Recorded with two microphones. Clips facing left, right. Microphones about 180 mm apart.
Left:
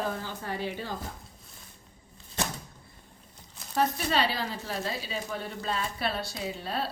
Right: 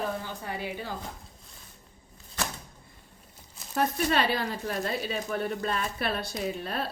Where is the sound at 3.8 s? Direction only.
55° right (ahead or behind).